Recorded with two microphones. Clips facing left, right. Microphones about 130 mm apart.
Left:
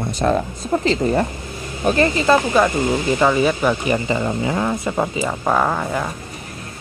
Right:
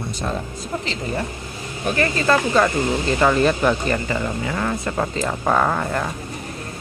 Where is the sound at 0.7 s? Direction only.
45° left (ahead or behind).